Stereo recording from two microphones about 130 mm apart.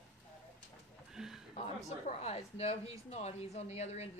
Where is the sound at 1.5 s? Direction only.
55° left (ahead or behind).